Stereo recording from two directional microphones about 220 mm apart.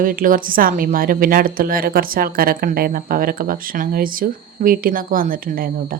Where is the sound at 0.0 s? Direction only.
40° right (ahead or behind).